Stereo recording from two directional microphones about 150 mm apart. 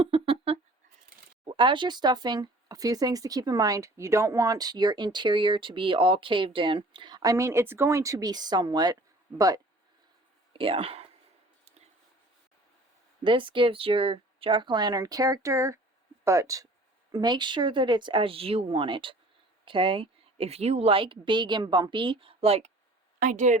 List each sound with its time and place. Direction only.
0.0 s a sound: 40° right (ahead or behind)
1.5 s speech: 35° right (ahead or behind)
10.5 s speech: 35° right (ahead or behind)
13.2 s speech: 35° right (ahead or behind)
23.2 s speech: 55° right (ahead or behind)